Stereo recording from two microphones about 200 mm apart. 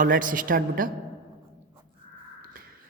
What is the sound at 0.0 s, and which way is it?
Speech, 45° right (ahead or behind).